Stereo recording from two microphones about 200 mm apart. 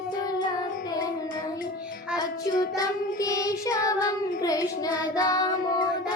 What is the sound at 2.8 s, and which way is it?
Child singing, 15° left (ahead or behind).